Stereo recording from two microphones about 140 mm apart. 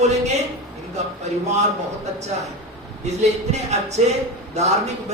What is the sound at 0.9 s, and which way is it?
Speech, 55° right (ahead or behind).